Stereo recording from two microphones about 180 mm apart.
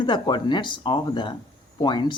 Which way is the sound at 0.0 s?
25° left (ahead or behind).